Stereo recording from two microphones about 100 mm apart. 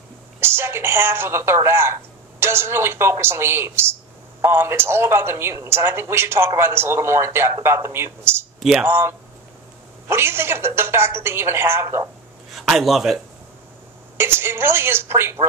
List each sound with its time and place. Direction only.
0.4 s a woman's voice: 25° right (ahead or behind)
8.5 s speech: 5° right (ahead or behind)
8.8 s a woman's voice: 25° right (ahead or behind)
12.5 s speech: centre (ahead or behind)
14.1 s a woman's voice: 25° right (ahead or behind)